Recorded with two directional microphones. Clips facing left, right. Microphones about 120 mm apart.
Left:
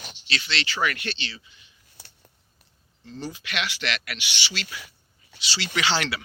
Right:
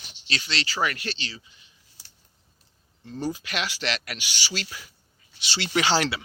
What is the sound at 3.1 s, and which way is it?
Speech, 40° right (ahead or behind).